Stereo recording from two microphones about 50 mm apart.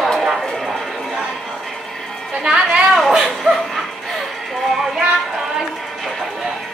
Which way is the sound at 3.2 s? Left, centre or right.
Centre.